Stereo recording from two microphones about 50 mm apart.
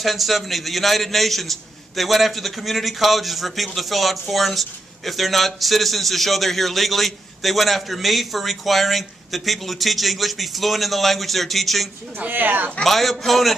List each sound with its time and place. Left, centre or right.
0.0 s a man's voice: centre
12.3 s speech: right
12.8 s a man's voice: centre